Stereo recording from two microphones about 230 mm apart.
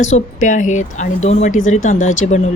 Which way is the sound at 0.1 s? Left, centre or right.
Left.